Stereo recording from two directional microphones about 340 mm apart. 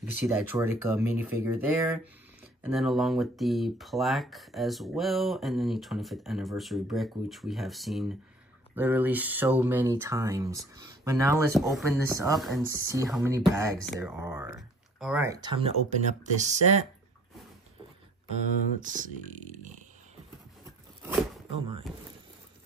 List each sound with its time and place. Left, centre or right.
0.5 s speech: centre
18.8 s speech: right